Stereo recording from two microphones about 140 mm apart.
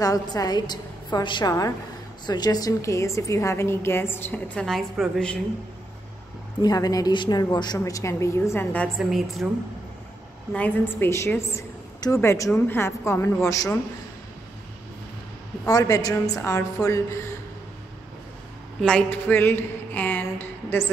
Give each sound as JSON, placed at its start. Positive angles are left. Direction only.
{"t": 0.0, "sound": "a woman's voice", "side_deg": 25}
{"t": 6.6, "sound": "a woman's voice", "side_deg": 25}
{"t": 8.9, "sound": "a woman's voice", "side_deg": 0}
{"t": 10.5, "sound": "a woman's voice", "side_deg": 15}
{"t": 15.6, "sound": "a woman's voice", "side_deg": 25}
{"t": 18.8, "sound": "speech", "side_deg": 5}